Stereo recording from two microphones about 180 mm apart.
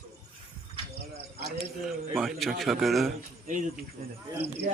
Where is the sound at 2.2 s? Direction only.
Centre (ahead or behind).